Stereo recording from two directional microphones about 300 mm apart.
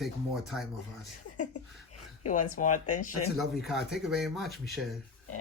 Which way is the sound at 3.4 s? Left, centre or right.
Centre.